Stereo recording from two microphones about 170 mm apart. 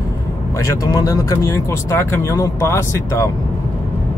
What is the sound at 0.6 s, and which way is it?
Speech, 20° left (ahead or behind).